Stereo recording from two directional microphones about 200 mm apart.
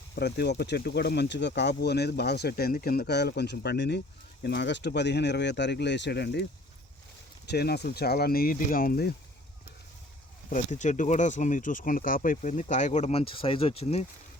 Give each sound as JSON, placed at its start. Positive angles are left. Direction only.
{"t": 0.2, "sound": "speech", "side_deg": 55}
{"t": 7.5, "sound": "speech", "side_deg": 55}
{"t": 10.5, "sound": "speech", "side_deg": 35}